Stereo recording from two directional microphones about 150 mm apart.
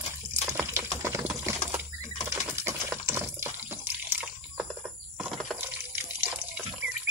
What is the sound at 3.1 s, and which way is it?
Water, 15° right (ahead or behind).